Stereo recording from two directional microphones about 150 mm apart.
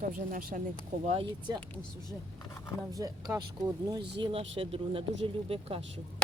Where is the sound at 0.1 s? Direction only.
65° right (ahead or behind).